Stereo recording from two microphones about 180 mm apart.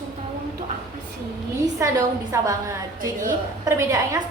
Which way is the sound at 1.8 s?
15° right (ahead or behind).